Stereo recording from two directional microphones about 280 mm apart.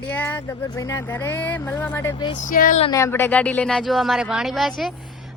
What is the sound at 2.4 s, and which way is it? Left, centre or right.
Speech, left.